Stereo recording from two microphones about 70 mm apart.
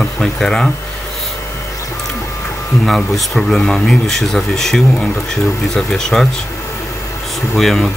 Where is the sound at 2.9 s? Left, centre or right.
Centre.